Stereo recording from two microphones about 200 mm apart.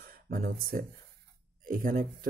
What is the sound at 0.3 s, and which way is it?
Speech, 45° right (ahead or behind).